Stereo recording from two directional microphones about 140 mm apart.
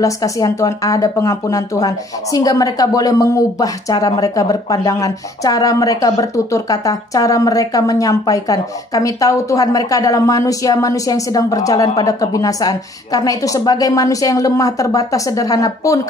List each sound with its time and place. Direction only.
0.0 s speech: 25° left (ahead or behind)